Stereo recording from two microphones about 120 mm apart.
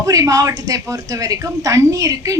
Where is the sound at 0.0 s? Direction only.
30° right (ahead or behind).